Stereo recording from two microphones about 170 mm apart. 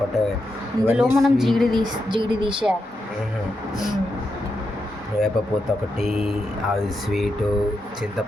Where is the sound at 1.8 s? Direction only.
30° right (ahead or behind).